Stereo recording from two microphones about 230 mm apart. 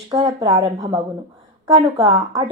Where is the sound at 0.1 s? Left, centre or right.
Centre.